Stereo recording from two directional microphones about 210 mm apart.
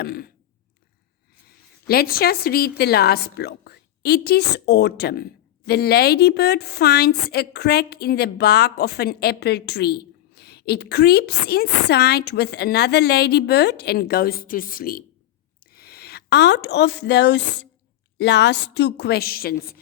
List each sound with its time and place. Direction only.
0.0 s a woman's voice: 45° left (ahead or behind)
1.9 s a woman's voice: 45° left (ahead or behind)